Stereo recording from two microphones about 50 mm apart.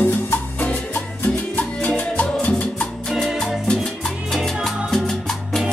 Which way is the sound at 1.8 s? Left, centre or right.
Left.